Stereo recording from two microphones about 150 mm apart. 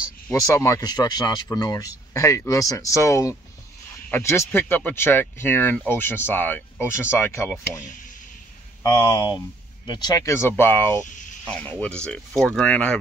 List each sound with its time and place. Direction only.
0.0 s speech: 20° left (ahead or behind)
7.8 s speech: 60° left (ahead or behind)
8.8 s speech: 25° left (ahead or behind)
11.1 s a sound: 60° left (ahead or behind)
11.4 s speech: 10° left (ahead or behind)